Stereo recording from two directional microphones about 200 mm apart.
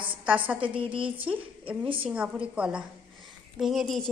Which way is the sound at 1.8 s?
25° right (ahead or behind).